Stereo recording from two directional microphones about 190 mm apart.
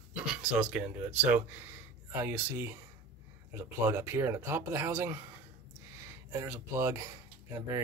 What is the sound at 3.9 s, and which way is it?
Speech, 10° right (ahead or behind).